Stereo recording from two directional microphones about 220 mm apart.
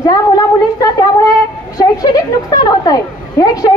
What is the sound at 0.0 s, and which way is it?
Speech, 15° left (ahead or behind).